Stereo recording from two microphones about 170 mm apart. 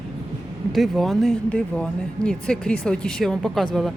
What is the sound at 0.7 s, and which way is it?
A woman's voice, centre (ahead or behind).